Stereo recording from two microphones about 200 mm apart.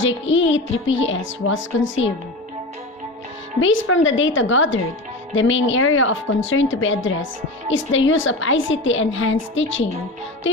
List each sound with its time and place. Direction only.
0.0 s a woman's voice: 70° left (ahead or behind)
3.6 s a woman's voice: 75° left (ahead or behind)